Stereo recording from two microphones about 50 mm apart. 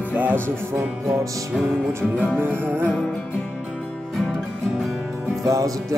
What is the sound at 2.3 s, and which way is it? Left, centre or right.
Music, right.